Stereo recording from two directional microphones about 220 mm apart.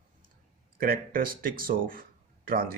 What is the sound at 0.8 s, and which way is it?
Speech, 40° right (ahead or behind).